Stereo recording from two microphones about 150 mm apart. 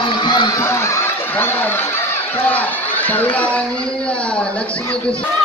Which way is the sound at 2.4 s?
10° left (ahead or behind).